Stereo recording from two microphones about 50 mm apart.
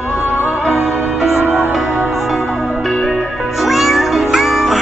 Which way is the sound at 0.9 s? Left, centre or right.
Centre.